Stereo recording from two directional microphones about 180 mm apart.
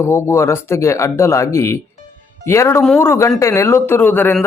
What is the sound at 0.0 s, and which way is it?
Speech, 15° left (ahead or behind).